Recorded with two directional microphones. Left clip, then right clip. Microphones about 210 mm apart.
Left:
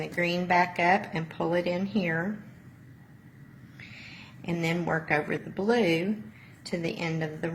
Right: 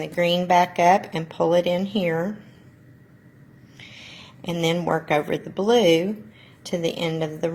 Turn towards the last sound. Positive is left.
turn(degrees=-25)  # may be behind; listen again after turning